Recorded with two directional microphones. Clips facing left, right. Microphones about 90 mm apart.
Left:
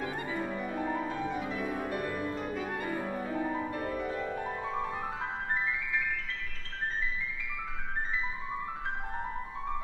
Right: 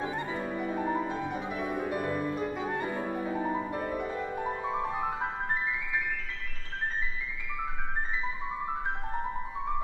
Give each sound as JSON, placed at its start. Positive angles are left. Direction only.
{"t": 0.0, "sound": "music", "side_deg": -20}